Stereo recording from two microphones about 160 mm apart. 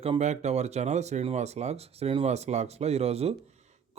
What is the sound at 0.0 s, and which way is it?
Speech, 40° right (ahead or behind).